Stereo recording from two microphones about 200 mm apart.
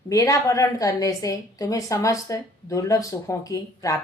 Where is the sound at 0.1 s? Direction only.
15° left (ahead or behind).